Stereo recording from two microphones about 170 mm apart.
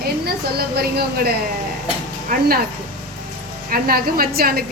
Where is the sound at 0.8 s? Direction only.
65° right (ahead or behind).